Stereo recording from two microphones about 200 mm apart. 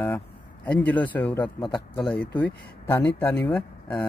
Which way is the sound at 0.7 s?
10° left (ahead or behind).